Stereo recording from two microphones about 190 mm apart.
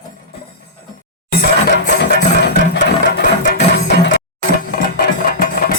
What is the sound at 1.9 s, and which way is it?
Music, 65° left (ahead or behind).